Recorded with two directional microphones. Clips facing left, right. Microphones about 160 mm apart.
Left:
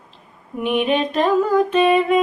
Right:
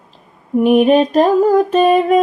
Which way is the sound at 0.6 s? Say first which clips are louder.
Right 8 dB; 40° right (ahead or behind).